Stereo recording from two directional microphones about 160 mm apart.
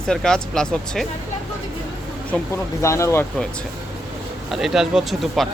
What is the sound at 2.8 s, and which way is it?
Speech, 20° left (ahead or behind).